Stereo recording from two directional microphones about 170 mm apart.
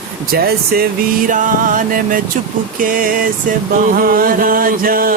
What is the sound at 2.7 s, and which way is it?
Chant, 55° right (ahead or behind).